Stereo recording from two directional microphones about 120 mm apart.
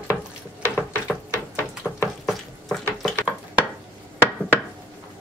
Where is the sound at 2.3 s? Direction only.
Centre (ahead or behind).